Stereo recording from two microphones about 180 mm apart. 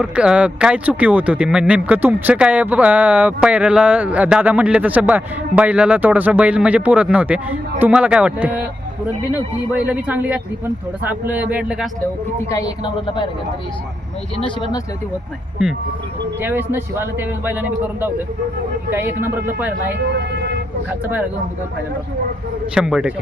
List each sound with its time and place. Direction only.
0.0 s speech: 5° right (ahead or behind)
12.5 s speech: 20° left (ahead or behind)
14.3 s speech: 25° left (ahead or behind)
15.6 s a man's voice: 5° right (ahead or behind)
19.9 s speech: 70° right (ahead or behind)
21.0 s speech: 10° right (ahead or behind)
22.7 s a man's voice: 5° right (ahead or behind)